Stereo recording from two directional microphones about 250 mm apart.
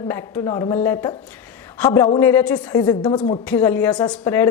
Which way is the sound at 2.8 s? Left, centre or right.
Centre.